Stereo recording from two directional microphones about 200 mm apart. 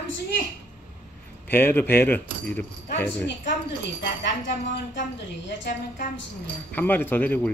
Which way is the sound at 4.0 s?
60° left (ahead or behind).